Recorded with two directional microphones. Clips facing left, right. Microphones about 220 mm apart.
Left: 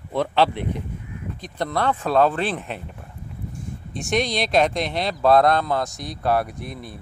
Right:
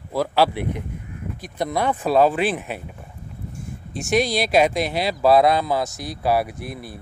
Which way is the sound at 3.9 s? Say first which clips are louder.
Right 3 dB; 5° right (ahead or behind).